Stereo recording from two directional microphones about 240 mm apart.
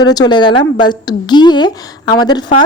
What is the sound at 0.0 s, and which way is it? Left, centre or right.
Speech, centre.